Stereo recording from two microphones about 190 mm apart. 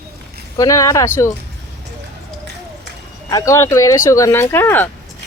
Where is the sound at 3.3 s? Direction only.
15° left (ahead or behind).